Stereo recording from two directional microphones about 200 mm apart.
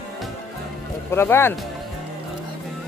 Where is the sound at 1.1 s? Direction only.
10° left (ahead or behind).